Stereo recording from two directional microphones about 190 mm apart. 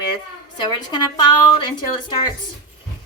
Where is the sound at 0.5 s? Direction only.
25° left (ahead or behind).